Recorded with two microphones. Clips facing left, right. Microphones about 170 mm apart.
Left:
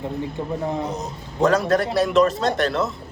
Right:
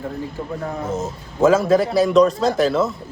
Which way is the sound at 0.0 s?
20° left (ahead or behind).